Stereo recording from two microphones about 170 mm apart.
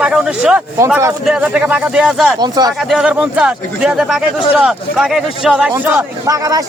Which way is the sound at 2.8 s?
5° right (ahead or behind).